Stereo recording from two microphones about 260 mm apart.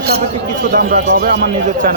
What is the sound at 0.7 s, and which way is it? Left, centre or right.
Speech, right.